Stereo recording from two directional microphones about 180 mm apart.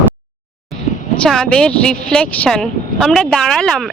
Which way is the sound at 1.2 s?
5° left (ahead or behind).